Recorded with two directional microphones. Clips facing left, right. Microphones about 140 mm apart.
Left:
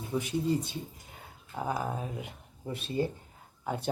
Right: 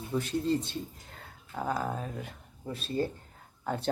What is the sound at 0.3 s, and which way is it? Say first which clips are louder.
Speech: even; centre (ahead or behind).